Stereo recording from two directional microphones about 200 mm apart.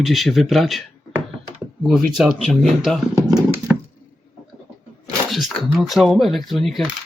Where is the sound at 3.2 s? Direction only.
20° right (ahead or behind).